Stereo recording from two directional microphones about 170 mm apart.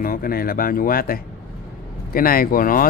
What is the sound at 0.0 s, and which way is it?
Speech, 60° left (ahead or behind).